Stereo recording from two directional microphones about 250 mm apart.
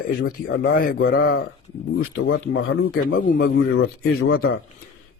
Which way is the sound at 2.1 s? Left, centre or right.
Left.